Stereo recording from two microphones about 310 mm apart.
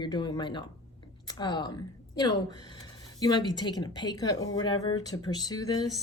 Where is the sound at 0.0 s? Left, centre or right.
Centre.